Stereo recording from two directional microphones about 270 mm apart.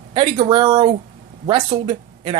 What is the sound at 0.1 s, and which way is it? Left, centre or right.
Speech, centre.